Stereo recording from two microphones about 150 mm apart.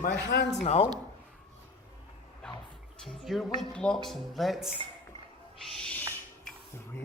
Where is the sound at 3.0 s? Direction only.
Centre (ahead or behind).